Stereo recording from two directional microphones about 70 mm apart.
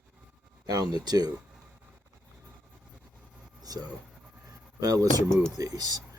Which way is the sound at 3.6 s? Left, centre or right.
Right.